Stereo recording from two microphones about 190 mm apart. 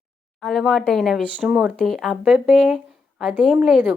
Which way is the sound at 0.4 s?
Centre (ahead or behind).